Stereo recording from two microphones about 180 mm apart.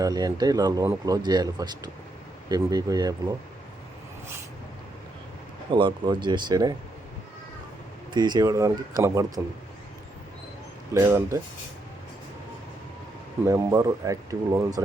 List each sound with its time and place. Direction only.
0.0 s speech: 20° right (ahead or behind)
5.7 s speech: 25° right (ahead or behind)
8.1 s speech: 25° right (ahead or behind)
10.9 s speech: 15° right (ahead or behind)
13.5 s speech: 15° right (ahead or behind)